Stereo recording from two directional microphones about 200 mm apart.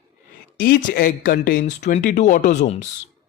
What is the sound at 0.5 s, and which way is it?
A man's voice, 50° left (ahead or behind).